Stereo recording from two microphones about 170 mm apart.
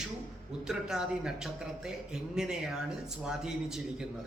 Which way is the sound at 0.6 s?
5° right (ahead or behind).